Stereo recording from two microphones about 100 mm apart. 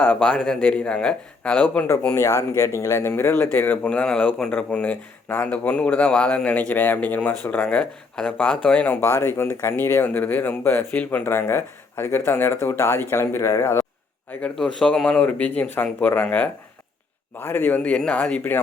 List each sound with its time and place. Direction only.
0.0 s speech: 15° left (ahead or behind)
2.1 s speech: 30° left (ahead or behind)
14.4 s speech: 10° left (ahead or behind)